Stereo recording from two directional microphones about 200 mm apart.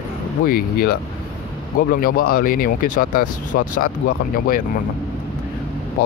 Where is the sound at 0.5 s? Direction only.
45° left (ahead or behind).